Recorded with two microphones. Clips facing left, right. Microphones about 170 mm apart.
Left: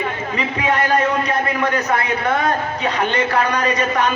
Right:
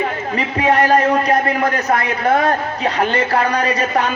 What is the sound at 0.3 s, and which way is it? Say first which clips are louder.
A man's voice: right 5 dB; 35° right (ahead or behind).